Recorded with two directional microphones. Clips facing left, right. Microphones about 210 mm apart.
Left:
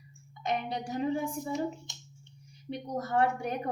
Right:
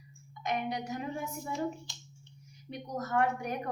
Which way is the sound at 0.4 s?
30° left (ahead or behind).